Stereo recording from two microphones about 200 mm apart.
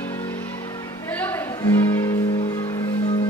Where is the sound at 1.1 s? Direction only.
10° left (ahead or behind).